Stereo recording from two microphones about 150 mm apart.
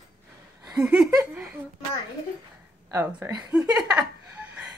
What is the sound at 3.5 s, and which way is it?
Speech, 5° right (ahead or behind).